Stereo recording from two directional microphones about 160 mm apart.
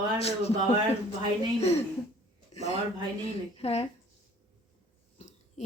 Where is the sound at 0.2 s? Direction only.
40° left (ahead or behind).